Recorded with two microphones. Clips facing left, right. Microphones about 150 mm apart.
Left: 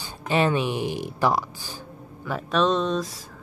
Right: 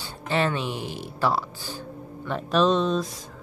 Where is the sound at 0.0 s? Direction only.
15° left (ahead or behind).